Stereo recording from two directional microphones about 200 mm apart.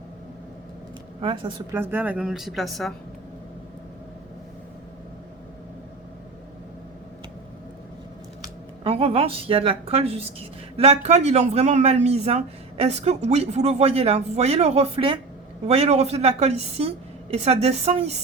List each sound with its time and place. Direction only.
1.2 s a woman's voice: 25° right (ahead or behind)
1.7 s a woman's voice: 10° right (ahead or behind)
8.4 s speech: 25° right (ahead or behind)